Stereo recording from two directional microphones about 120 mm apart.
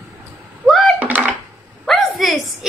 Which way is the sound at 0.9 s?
15° right (ahead or behind).